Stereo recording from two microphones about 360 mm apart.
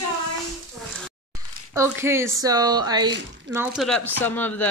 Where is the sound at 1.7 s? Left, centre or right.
Centre.